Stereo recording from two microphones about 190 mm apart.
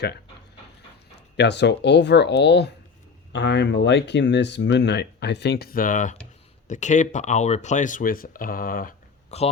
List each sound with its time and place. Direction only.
1.4 s speech: 65° left (ahead or behind); by 9.0 s 50° left (ahead or behind)
9.3 s speech: 35° left (ahead or behind)